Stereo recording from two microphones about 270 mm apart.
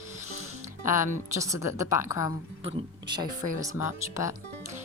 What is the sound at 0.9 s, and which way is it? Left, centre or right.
A woman's voice, centre.